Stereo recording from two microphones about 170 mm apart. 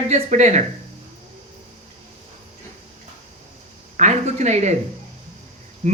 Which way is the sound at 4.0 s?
45° right (ahead or behind).